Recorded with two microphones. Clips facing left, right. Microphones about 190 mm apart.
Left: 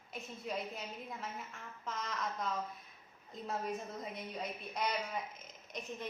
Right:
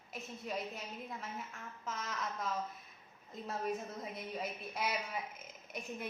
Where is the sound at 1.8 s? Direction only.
Centre (ahead or behind).